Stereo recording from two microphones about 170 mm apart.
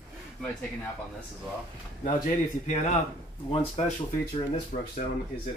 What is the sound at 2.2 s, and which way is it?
Speech, 45° left (ahead or behind).